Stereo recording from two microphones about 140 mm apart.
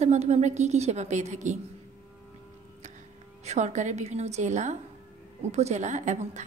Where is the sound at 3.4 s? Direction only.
55° right (ahead or behind).